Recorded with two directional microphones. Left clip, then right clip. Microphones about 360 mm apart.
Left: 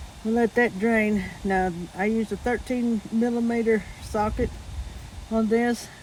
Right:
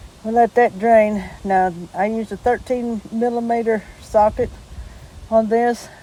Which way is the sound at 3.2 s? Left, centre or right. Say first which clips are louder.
Right 7 dB; right.